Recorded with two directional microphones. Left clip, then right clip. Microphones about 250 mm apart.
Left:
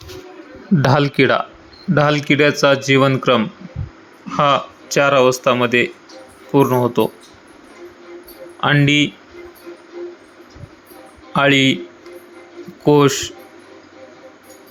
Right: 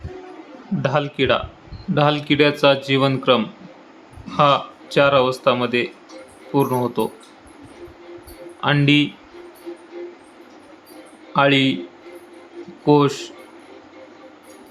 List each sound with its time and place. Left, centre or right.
0.8 s speech: left; by 7.1 s centre
8.6 s speech: centre
11.3 s speech: centre
12.8 s speech: centre